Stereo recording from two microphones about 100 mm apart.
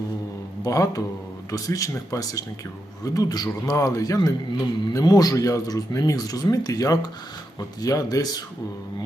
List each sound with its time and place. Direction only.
0.6 s speech: 35° left (ahead or behind)